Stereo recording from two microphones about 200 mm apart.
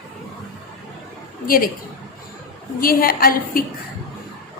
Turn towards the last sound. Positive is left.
turn(degrees=45)  # may be behind; listen again after turning